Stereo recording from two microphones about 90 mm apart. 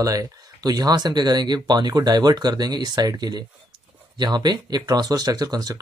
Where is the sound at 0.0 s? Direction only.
40° right (ahead or behind).